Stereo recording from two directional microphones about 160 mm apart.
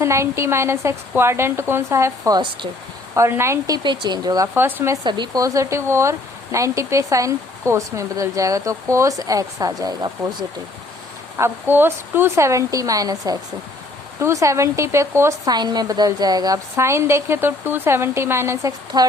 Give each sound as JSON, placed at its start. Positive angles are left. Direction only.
{"t": 0.0, "sound": "speech", "side_deg": -15}
{"t": 3.2, "sound": "speech", "side_deg": -15}
{"t": 3.8, "sound": "speech", "side_deg": -25}
{"t": 4.5, "sound": "speech", "side_deg": -15}
{"t": 5.0, "sound": "speech", "side_deg": -30}
{"t": 11.3, "sound": "speech", "side_deg": -15}